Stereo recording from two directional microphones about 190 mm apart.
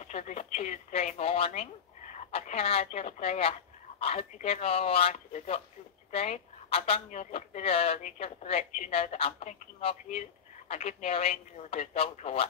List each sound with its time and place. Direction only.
0.0 s speech: 35° left (ahead or behind)